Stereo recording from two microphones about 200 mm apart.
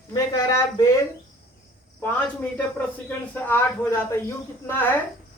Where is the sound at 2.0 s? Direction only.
10° left (ahead or behind).